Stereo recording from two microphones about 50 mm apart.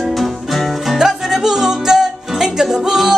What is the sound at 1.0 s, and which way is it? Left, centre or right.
Music, centre.